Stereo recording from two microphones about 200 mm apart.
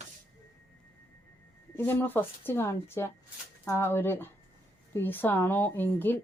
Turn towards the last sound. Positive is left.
turn(degrees=10)  # may be behind; listen again after turning